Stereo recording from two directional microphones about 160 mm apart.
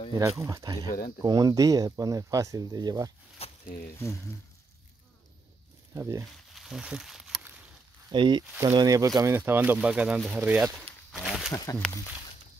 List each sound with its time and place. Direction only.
0.2 s speech: 20° right (ahead or behind)
3.6 s speech: 65° left (ahead or behind)
5.9 s speech: 20° right (ahead or behind)
6.5 s speech: centre (ahead or behind)
8.1 s speech: 30° right (ahead or behind); by 10.8 s 10° right (ahead or behind)
11.1 s a sound: 5° left (ahead or behind)
11.5 s speech: 20° left (ahead or behind)